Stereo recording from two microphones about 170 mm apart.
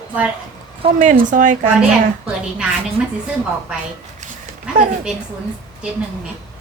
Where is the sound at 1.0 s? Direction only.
50° right (ahead or behind).